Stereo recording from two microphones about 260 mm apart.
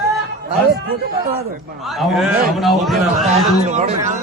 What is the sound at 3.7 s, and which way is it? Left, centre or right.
Speech, right.